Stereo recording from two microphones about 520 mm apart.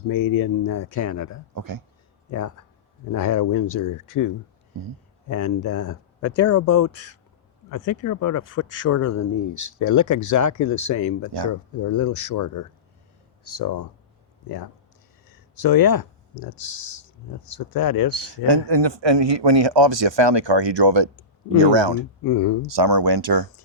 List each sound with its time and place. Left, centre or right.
0.1 s speech: left
1.5 s speech: right
2.3 s speech: left
5.3 s speech: left
15.5 s speech: left
18.4 s speech: right
22.3 s speech: left
22.7 s speech: right